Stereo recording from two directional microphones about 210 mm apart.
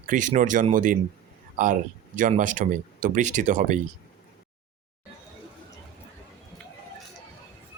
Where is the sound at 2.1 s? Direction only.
40° right (ahead or behind).